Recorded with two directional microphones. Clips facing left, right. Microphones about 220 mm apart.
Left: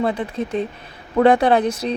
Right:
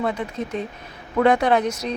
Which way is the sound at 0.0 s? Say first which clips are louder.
Left 3 dB; 35° left (ahead or behind).